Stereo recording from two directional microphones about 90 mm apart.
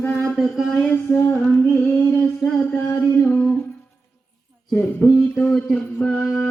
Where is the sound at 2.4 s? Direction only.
55° left (ahead or behind).